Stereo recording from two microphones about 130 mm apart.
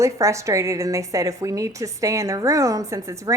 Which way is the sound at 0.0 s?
25° right (ahead or behind).